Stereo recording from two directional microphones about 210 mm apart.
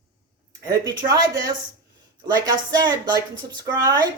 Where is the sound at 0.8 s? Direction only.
20° right (ahead or behind).